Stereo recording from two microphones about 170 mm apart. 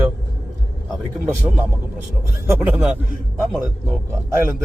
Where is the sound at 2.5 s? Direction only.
10° right (ahead or behind).